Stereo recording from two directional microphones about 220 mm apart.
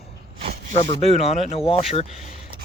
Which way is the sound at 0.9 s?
30° left (ahead or behind).